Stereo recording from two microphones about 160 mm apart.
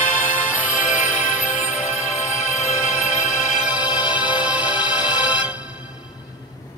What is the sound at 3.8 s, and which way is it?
Music, 30° left (ahead or behind).